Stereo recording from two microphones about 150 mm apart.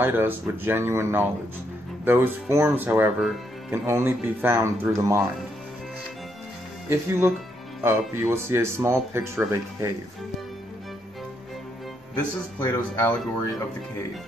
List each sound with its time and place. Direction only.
0.0 s speech: 15° right (ahead or behind)
6.9 s speech: 15° right (ahead or behind)
12.5 s speech: 20° left (ahead or behind)